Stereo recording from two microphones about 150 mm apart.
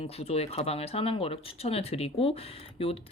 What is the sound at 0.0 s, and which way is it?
Speech, 40° left (ahead or behind).